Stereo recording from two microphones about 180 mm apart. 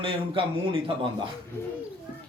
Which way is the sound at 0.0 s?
30° right (ahead or behind).